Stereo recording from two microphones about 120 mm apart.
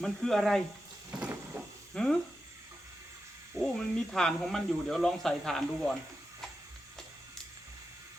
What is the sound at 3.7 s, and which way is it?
Speech, 5° left (ahead or behind).